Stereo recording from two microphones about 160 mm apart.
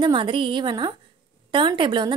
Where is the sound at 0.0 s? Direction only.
30° right (ahead or behind).